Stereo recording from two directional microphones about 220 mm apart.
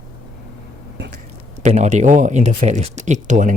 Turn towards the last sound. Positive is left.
turn(degrees=-35)  # may be behind; listen again after turning